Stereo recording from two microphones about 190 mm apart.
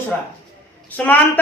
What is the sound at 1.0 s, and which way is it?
Speech, 10° left (ahead or behind).